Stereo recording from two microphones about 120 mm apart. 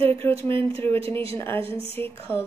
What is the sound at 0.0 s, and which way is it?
A woman's voice, 20° left (ahead or behind).